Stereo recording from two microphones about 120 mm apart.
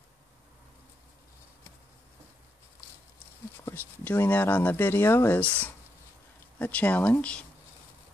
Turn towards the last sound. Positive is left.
turn(degrees=10)  # may be behind; listen again after turning